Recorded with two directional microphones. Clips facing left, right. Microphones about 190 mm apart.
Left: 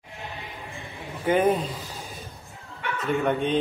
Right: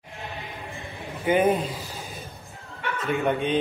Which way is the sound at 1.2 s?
5° right (ahead or behind).